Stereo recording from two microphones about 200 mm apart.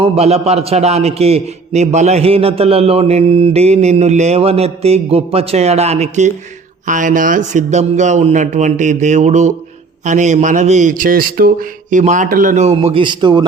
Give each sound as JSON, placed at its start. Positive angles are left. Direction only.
{"t": 0.0, "sound": "a man's voice", "side_deg": -30}